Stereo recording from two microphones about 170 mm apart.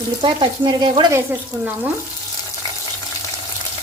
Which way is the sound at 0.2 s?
30° right (ahead or behind).